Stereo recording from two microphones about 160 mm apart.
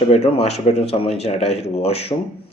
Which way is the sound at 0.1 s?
40° left (ahead or behind).